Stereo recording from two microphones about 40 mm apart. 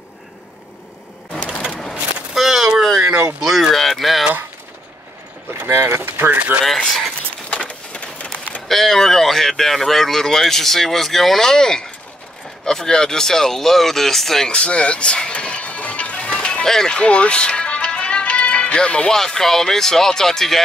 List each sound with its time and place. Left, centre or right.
2.3 s a sound: centre
3.4 s speech: centre
5.5 s speech: right
6.6 s speech: centre
7.5 s a sound: left
8.6 s speech: centre
14.5 s music: left
16.6 s speech: centre
16.9 s music: left
19.0 s speech: centre